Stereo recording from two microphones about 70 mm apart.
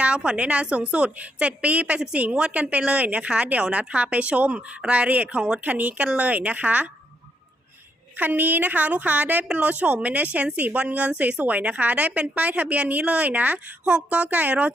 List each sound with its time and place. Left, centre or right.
0.0 s a woman's voice: centre
8.1 s a woman's voice: right